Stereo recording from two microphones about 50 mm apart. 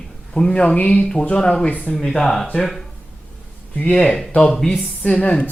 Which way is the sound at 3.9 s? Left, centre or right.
Left.